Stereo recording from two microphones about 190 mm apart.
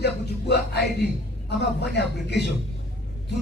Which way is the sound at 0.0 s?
60° left (ahead or behind).